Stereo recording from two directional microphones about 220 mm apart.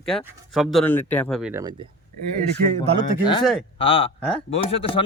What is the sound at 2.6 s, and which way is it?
Speech, 30° right (ahead or behind).